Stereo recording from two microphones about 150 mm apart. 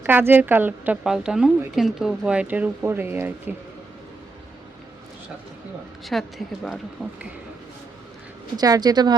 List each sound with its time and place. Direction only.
0.0 s a woman's voice: 15° right (ahead or behind)
6.1 s a woman's voice: 5° left (ahead or behind)
8.5 s a woman's voice: 25° right (ahead or behind)